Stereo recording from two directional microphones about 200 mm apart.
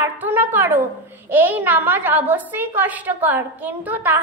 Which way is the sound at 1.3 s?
10° right (ahead or behind).